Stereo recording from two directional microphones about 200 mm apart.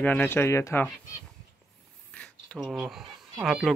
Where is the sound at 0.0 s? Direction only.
10° left (ahead or behind).